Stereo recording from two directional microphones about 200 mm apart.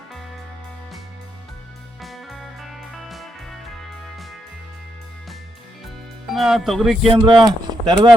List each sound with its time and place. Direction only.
2.0 s music: centre (ahead or behind)
6.3 s music: centre (ahead or behind)
7.1 s speech: 25° right (ahead or behind)